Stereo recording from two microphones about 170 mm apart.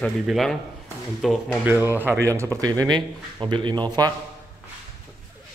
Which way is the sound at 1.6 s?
10° right (ahead or behind).